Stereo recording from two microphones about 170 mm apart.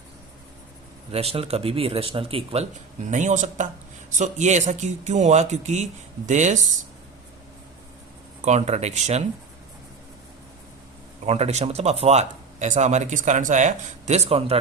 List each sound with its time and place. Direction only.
1.1 s speech: 35° right (ahead or behind)
3.1 s speech: 45° right (ahead or behind)
8.4 s speech: 40° right (ahead or behind)
11.3 s speech: 40° right (ahead or behind)